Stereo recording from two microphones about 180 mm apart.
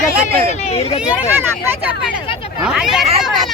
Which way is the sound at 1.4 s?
10° right (ahead or behind).